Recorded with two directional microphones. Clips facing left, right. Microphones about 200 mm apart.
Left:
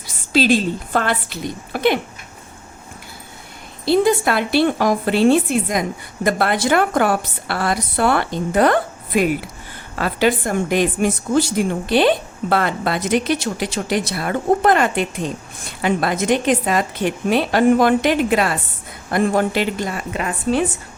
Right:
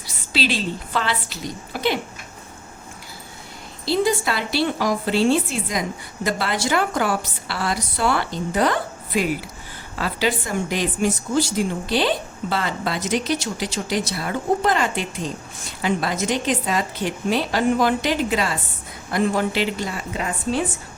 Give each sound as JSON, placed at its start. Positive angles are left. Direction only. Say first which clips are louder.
{"t": 0.3, "sound": "a woman's voice", "louder": "left 7 dB", "side_deg": 45}
{"t": 3.8, "sound": "a woman's voice", "louder": "left 5 dB", "side_deg": 55}